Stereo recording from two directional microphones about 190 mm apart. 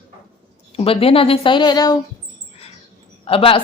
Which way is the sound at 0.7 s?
30° left (ahead or behind).